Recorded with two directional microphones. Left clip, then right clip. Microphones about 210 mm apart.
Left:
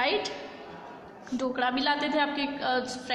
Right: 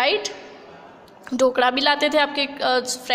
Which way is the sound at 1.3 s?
50° right (ahead or behind).